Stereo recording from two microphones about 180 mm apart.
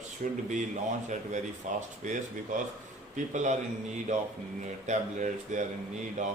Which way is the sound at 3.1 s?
40° right (ahead or behind).